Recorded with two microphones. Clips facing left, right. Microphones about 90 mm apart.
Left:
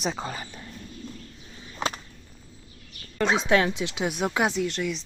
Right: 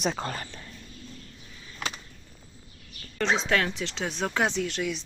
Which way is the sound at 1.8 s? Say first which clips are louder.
Left 6 dB; 25° left (ahead or behind).